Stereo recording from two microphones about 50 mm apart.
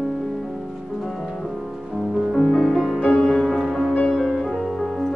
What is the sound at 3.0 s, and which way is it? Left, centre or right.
Music, left.